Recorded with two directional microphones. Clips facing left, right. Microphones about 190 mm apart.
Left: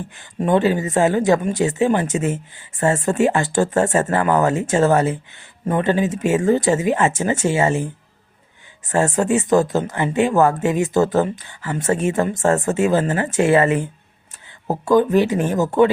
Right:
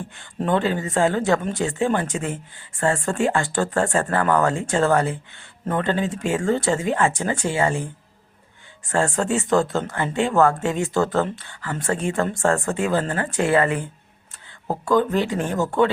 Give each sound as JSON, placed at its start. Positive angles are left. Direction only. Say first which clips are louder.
{"t": 0.2, "sound": "speech", "louder": "left 5 dB", "side_deg": 15}
{"t": 8.9, "sound": "speech", "louder": "left 4 dB", "side_deg": 20}